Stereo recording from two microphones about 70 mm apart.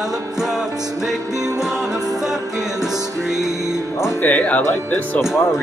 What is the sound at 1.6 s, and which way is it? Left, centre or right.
Music, centre.